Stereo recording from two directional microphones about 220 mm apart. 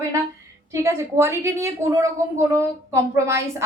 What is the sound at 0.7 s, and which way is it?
A woman's voice, 15° right (ahead or behind).